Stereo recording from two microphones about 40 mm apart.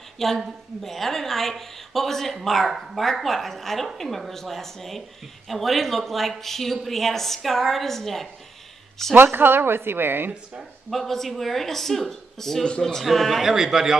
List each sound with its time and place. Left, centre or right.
0.2 s a woman's voice: centre
9.1 s a woman's voice: right
10.9 s a woman's voice: centre
13.4 s a man's voice: centre